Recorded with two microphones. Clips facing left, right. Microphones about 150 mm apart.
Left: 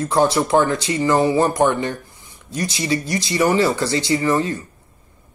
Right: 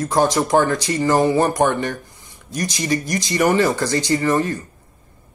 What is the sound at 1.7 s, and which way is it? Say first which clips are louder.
Speech: even; 20° left (ahead or behind).